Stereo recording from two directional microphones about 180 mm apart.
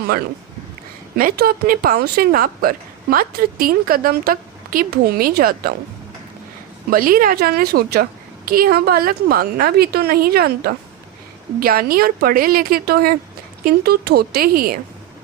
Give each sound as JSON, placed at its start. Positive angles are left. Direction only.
{"t": 1.1, "sound": "a woman's voice", "side_deg": -55}
{"t": 6.9, "sound": "a woman's voice", "side_deg": -50}